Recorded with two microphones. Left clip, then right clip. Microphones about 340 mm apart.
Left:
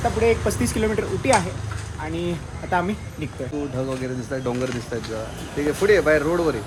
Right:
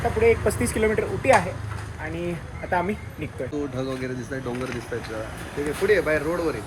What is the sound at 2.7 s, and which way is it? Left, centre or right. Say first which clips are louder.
Speech: left 2 dB; centre.